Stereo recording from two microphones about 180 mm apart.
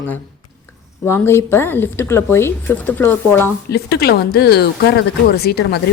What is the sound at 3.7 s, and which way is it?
Speech, 65° left (ahead or behind).